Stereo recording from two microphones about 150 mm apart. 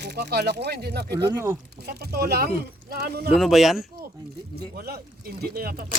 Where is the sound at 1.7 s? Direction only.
90° right.